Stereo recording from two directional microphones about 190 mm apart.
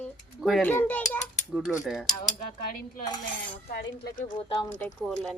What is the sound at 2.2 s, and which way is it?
Cutlery, 45° left (ahead or behind).